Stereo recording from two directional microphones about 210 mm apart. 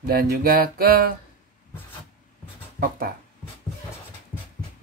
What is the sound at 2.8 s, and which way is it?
Speech, 45° right (ahead or behind).